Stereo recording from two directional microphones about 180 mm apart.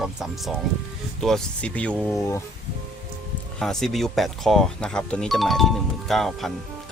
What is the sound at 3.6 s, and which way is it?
Speech, centre (ahead or behind).